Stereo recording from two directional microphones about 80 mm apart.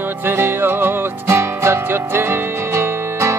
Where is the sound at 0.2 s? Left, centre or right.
Right.